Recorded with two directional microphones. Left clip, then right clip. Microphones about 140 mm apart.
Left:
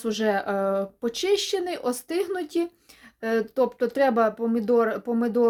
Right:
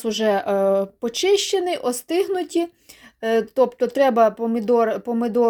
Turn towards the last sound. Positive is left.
turn(degrees=-30)  # may be behind; listen again after turning